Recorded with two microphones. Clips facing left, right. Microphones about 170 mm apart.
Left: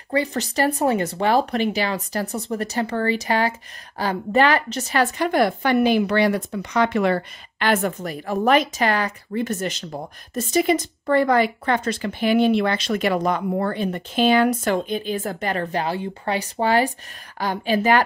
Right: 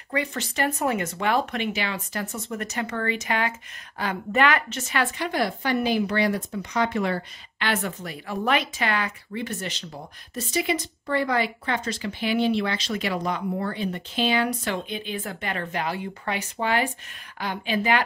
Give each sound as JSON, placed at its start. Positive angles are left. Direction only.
{"t": 0.1, "sound": "a woman's voice", "side_deg": 35}
{"t": 7.5, "sound": "a woman's voice", "side_deg": 45}